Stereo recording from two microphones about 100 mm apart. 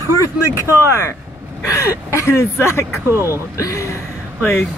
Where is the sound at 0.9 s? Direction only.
25° left (ahead or behind).